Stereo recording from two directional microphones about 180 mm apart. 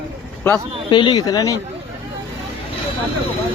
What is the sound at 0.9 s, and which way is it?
Speech, 25° left (ahead or behind).